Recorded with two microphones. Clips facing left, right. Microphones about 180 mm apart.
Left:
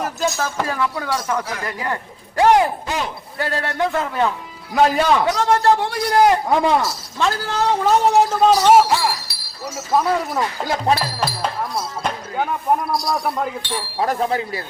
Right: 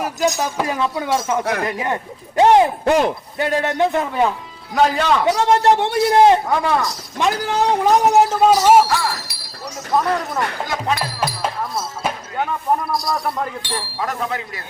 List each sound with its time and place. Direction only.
0.0 s speech: 15° right (ahead or behind)
2.8 s speech: 60° right (ahead or behind)
3.3 s a man's voice: 20° right (ahead or behind)
4.7 s a man's voice: 10° left (ahead or behind)
5.3 s a man's voice: 15° right (ahead or behind)
6.5 s speech: 20° left (ahead or behind)
7.2 s speech: 15° right (ahead or behind)
9.9 s speech: centre (ahead or behind)
10.7 s speech: 35° left (ahead or behind)
11.2 s speech: 5° right (ahead or behind)
14.0 s speech: 35° left (ahead or behind)